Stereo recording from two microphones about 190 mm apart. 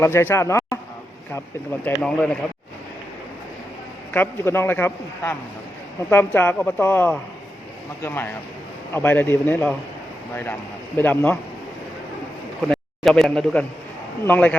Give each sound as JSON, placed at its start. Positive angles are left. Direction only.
{"t": 0.0, "sound": "speech", "side_deg": 15}
{"t": 2.0, "sound": "speech", "side_deg": 5}
{"t": 4.1, "sound": "a man's voice", "side_deg": 10}
{"t": 10.9, "sound": "a man's voice", "side_deg": 10}
{"t": 12.6, "sound": "a man's voice", "side_deg": 0}